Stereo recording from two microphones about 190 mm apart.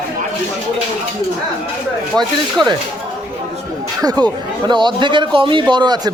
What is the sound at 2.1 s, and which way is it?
Speech, 5° left (ahead or behind).